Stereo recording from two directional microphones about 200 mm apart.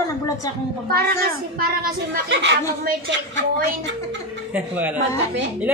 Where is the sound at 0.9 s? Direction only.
50° right (ahead or behind).